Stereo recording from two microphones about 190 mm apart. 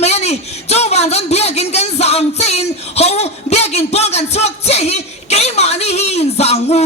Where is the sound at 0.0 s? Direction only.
35° left (ahead or behind).